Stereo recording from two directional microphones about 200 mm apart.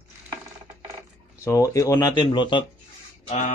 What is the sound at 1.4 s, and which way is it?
Speech, 15° left (ahead or behind).